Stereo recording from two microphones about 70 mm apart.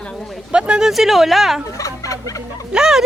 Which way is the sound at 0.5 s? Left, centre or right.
Centre.